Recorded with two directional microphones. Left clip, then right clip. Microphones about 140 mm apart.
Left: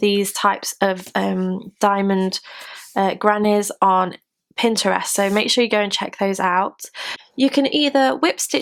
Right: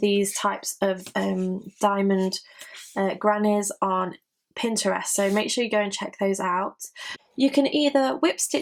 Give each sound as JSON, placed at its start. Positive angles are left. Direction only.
{"t": 0.0, "sound": "speech", "side_deg": 40}